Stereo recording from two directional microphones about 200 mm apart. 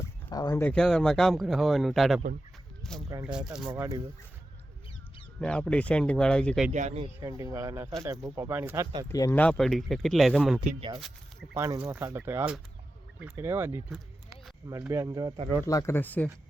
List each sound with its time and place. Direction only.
0.0 s speech: 20° left (ahead or behind); by 2.2 s centre (ahead or behind)
2.8 s a sound: centre (ahead or behind)
3.2 s speech: 5° right (ahead or behind)
3.7 s speech: 15° right (ahead or behind)
5.4 s speech: 5° left (ahead or behind)
6.7 s speech: 35° right (ahead or behind)
7.2 s speech: 15° right (ahead or behind)
9.0 s speech: 15° left (ahead or behind)
10.6 s speech: 30° right (ahead or behind)
11.5 s speech: 15° right (ahead or behind)
15.6 s speech: 15° left (ahead or behind)